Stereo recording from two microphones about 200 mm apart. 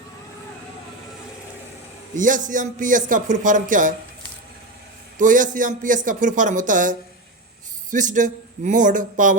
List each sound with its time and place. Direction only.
2.1 s a man's voice: 40° right (ahead or behind)
5.1 s a man's voice: 40° right (ahead or behind)